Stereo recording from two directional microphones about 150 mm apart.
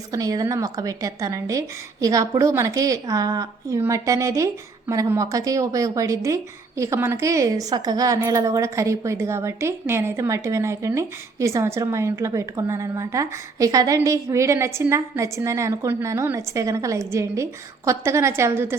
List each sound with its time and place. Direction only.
0.1 s a woman's voice: 25° right (ahead or behind)